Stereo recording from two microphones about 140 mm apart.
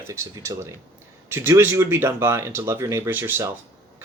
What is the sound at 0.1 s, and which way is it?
Speech, 20° right (ahead or behind).